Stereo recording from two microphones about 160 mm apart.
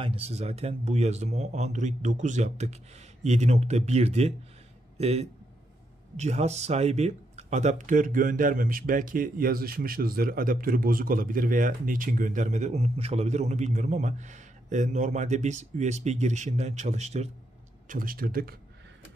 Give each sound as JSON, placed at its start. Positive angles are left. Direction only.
{"t": 0.0, "sound": "speech", "side_deg": -35}
{"t": 17.8, "sound": "speech", "side_deg": -60}